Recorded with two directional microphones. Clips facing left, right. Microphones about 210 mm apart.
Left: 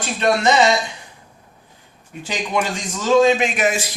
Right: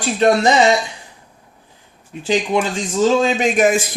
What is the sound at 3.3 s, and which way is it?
Speech, 40° right (ahead or behind).